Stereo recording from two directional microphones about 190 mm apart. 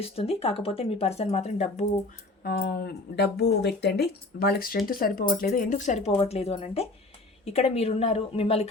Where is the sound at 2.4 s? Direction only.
50° left (ahead or behind).